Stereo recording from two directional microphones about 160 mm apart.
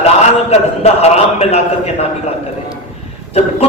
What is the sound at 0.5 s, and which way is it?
A man's voice, 40° left (ahead or behind).